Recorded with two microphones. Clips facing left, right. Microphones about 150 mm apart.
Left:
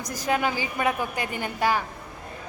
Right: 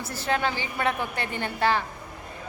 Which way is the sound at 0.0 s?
15° left (ahead or behind).